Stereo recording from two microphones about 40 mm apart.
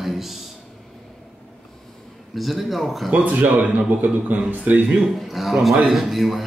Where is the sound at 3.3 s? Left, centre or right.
Right.